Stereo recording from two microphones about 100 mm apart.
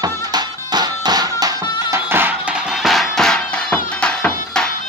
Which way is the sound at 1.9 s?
20° right (ahead or behind).